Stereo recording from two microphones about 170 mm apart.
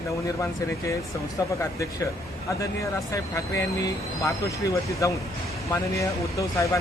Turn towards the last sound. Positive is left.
turn(degrees=20)  # may be behind; listen again after turning